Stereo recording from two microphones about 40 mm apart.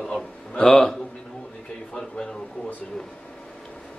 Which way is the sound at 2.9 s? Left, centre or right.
Centre.